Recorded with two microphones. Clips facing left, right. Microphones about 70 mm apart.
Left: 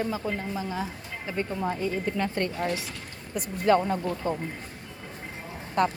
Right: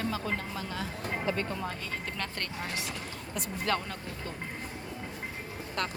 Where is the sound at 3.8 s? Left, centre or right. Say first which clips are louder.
Left 11 dB; left.